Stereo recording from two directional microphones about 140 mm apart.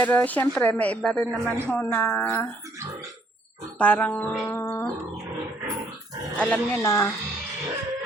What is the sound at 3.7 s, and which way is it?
Speech, 10° left (ahead or behind).